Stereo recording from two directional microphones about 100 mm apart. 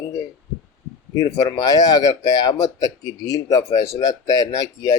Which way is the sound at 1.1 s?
35° left (ahead or behind).